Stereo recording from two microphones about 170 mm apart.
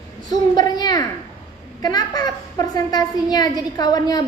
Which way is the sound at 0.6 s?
20° left (ahead or behind).